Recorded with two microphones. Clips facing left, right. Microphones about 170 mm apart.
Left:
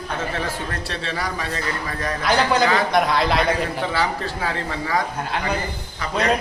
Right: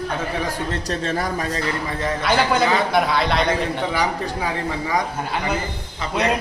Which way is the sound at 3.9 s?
15° right (ahead or behind).